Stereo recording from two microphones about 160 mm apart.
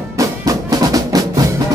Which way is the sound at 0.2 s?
20° right (ahead or behind).